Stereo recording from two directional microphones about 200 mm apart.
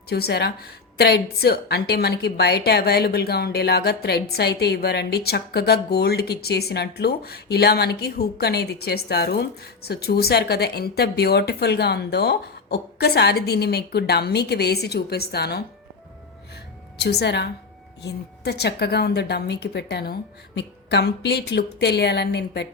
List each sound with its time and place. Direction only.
0.1 s a woman's voice: 55° left (ahead or behind)
17.0 s a woman's voice: 55° left (ahead or behind)